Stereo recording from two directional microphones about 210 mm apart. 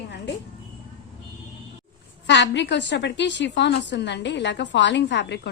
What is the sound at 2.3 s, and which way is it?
A woman's voice, 60° left (ahead or behind).